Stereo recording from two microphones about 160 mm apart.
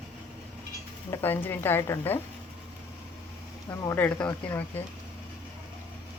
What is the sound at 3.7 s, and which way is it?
Speech, 15° left (ahead or behind).